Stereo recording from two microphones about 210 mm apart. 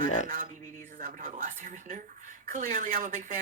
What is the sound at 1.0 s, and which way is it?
Speech, 35° right (ahead or behind).